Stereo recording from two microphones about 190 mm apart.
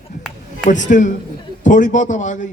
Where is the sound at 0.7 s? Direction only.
40° left (ahead or behind).